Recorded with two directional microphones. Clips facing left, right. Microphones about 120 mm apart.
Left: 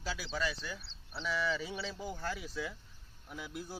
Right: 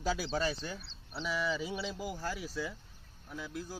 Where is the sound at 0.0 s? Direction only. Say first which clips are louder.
Right 5 dB; 45° right (ahead or behind).